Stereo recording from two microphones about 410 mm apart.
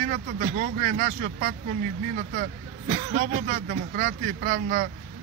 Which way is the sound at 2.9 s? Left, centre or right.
Right.